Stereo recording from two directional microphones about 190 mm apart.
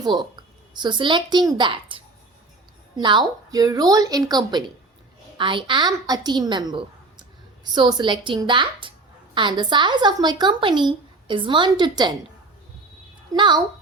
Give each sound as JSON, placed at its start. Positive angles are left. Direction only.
{"t": 0.0, "sound": "a woman's voice", "side_deg": -25}
{"t": 13.3, "sound": "a woman's voice", "side_deg": -25}